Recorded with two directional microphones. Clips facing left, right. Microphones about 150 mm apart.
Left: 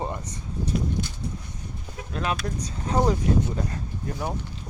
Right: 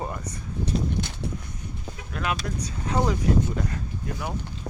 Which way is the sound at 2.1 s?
30° left (ahead or behind).